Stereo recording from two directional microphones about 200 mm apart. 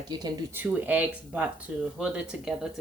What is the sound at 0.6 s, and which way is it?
A woman's voice, 10° right (ahead or behind).